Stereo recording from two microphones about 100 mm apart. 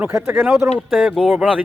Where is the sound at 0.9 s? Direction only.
Centre (ahead or behind).